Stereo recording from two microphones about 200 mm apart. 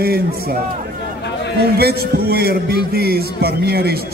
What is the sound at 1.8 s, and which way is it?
A man's voice, 50° right (ahead or behind).